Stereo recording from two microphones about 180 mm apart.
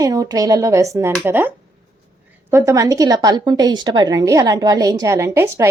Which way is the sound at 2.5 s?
15° right (ahead or behind).